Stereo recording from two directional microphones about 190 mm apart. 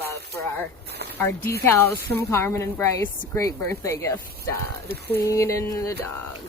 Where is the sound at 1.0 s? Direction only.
60° right (ahead or behind).